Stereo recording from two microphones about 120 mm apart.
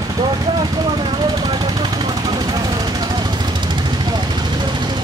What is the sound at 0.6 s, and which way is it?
Vehicle, 35° right (ahead or behind).